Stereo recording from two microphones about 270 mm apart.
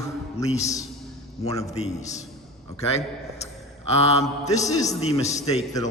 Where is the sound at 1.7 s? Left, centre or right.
Left.